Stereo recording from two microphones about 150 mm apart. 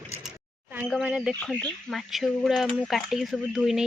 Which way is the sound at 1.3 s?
10° left (ahead or behind).